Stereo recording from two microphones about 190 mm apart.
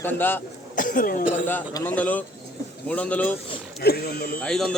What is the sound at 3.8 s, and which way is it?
Speech, 55° left (ahead or behind).